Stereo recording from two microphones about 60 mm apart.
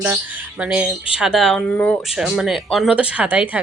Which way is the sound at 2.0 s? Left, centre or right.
Centre.